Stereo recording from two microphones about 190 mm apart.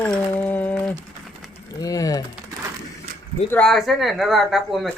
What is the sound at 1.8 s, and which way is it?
Speech, 20° left (ahead or behind).